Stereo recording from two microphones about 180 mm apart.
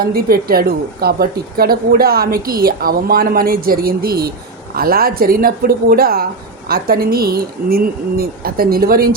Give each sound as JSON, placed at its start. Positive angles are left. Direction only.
{"t": 0.0, "sound": "a woman's voice", "side_deg": -55}